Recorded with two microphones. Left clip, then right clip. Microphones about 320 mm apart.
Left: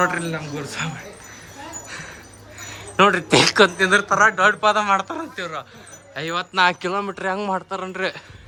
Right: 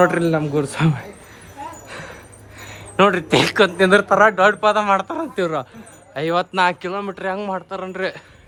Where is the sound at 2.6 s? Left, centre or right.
Centre.